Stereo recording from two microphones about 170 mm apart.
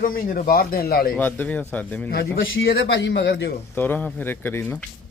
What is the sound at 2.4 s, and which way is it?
A man's voice, 70° left (ahead or behind).